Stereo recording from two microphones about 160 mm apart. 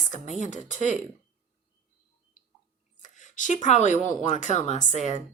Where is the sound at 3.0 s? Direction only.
50° left (ahead or behind).